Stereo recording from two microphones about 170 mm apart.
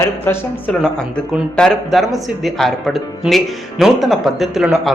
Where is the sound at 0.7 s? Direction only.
5° left (ahead or behind).